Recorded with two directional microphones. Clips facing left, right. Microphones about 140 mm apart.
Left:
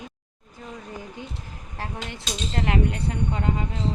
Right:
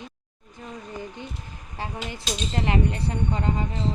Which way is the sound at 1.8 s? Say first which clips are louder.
Right 1 dB; centre (ahead or behind).